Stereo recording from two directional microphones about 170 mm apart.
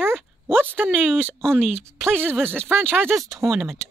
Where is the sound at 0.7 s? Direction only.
10° right (ahead or behind).